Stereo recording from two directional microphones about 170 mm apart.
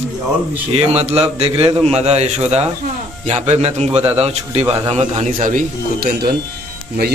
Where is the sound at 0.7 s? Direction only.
40° right (ahead or behind).